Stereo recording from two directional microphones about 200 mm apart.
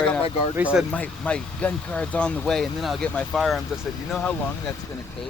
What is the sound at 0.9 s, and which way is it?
Speech, 5° left (ahead or behind).